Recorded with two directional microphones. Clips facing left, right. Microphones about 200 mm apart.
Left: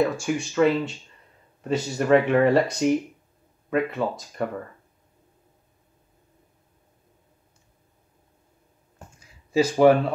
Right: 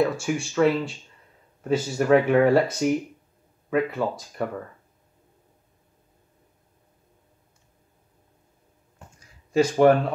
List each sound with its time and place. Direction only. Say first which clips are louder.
0.0 s speech: even; centre (ahead or behind)
9.5 s speech: even; 5° left (ahead or behind)